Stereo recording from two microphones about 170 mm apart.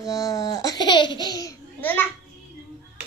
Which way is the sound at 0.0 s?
20° left (ahead or behind).